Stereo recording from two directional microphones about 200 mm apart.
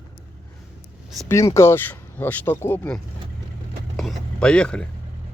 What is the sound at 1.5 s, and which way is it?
Speech, 10° left (ahead or behind).